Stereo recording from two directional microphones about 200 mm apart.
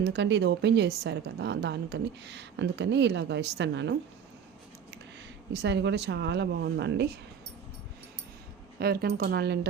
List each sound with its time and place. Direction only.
0.0 s a woman's voice: 60° right (ahead or behind)
5.5 s a woman's voice: 60° right (ahead or behind)
8.8 s speech: 50° right (ahead or behind)